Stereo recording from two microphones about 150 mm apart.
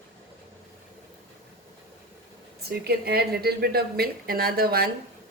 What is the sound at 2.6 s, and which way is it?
A woman's voice, 90° right.